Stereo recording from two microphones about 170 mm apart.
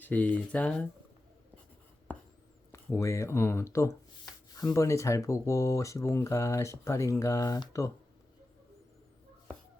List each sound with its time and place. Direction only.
0.0 s speech: 10° left (ahead or behind)
2.7 s speech: 15° left (ahead or behind)